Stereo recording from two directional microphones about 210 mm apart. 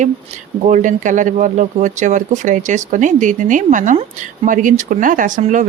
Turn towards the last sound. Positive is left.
turn(degrees=-35)  # may be behind; listen again after turning